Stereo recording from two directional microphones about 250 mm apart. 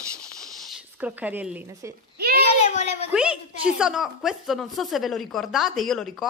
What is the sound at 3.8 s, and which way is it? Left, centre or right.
Speech, centre.